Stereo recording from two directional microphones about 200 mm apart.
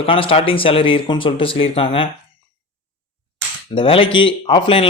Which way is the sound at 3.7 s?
25° left (ahead or behind).